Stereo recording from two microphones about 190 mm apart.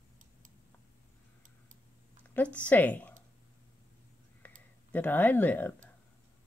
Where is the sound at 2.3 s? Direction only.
5° left (ahead or behind).